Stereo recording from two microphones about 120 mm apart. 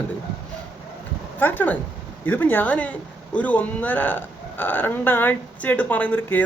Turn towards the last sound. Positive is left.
turn(degrees=15)  # may be behind; listen again after turning